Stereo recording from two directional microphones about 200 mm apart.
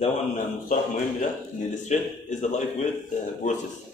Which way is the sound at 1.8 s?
35° left (ahead or behind).